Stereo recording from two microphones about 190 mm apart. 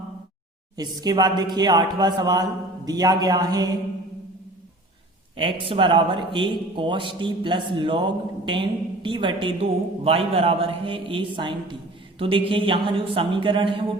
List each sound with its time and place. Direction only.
0.8 s a man's voice: 20° right (ahead or behind)
5.4 s a man's voice: 30° right (ahead or behind)